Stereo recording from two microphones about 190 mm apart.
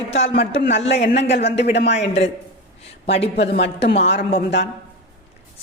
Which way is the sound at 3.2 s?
65° left (ahead or behind).